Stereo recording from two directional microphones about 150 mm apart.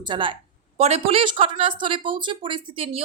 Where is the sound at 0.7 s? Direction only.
45° right (ahead or behind).